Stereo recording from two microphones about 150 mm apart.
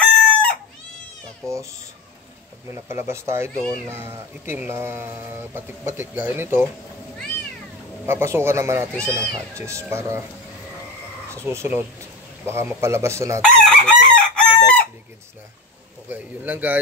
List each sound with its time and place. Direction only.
0.0 s chicken: 10° left (ahead or behind)
1.4 s speech: 20° right (ahead or behind)
2.7 s speech: 15° right (ahead or behind)
8.0 s speech: 15° right (ahead or behind)
11.2 s speech: 15° right (ahead or behind)
13.4 s chicken: 5° left (ahead or behind)
16.1 s speech: 10° right (ahead or behind)